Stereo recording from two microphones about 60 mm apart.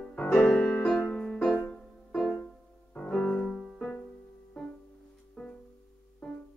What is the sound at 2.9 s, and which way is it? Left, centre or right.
Music, centre.